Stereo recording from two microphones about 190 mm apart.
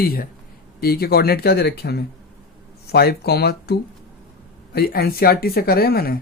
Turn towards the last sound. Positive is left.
turn(degrees=55)  # may be behind; listen again after turning